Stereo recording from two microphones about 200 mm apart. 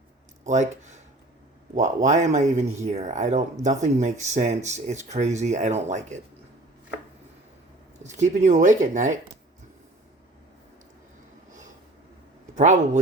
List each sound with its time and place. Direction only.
0.4 s speech: 35° right (ahead or behind)
8.0 s speech: 35° right (ahead or behind)
12.5 s speech: 35° right (ahead or behind)